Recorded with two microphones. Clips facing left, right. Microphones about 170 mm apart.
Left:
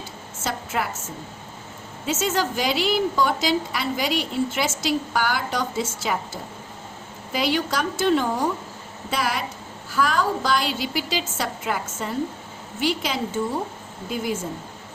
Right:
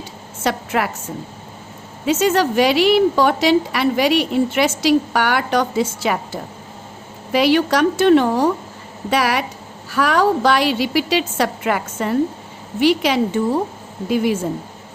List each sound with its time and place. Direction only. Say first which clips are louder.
0.4 s a woman's voice: right 7 dB; 65° right (ahead or behind)
2.0 s a woman's voice: right 8 dB; 65° right (ahead or behind)